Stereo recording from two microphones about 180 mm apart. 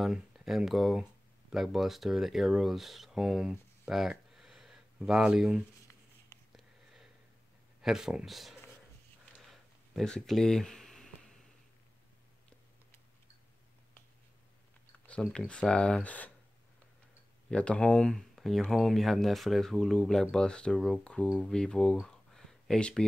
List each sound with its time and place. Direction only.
0.0 s speech: centre (ahead or behind)
6.5 s sniff: centre (ahead or behind)
7.8 s speech: centre (ahead or behind)
9.4 s a sound: centre (ahead or behind)
15.0 s speech: 5° left (ahead or behind)
17.5 s speech: 5° left (ahead or behind)